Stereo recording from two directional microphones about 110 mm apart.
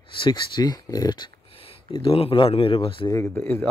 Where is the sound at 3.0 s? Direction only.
30° left (ahead or behind).